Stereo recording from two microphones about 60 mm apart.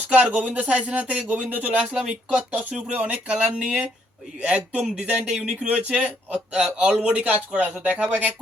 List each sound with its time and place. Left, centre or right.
0.1 s speech: right
3.2 s speech: centre